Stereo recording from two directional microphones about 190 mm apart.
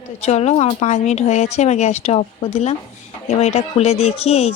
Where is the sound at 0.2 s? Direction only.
35° left (ahead or behind).